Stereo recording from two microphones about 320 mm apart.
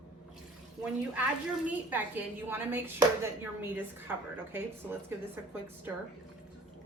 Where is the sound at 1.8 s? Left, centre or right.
Centre.